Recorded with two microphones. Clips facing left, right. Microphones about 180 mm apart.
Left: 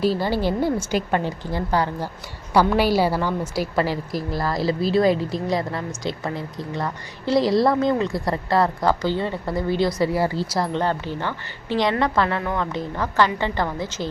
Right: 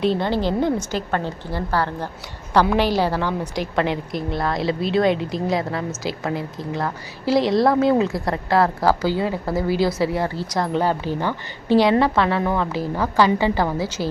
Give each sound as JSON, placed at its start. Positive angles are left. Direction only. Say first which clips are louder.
{"t": 0.0, "sound": "a woman's voice", "louder": "right 1 dB", "side_deg": 5}
{"t": 10.7, "sound": "a woman's voice", "louder": "right 3 dB", "side_deg": -10}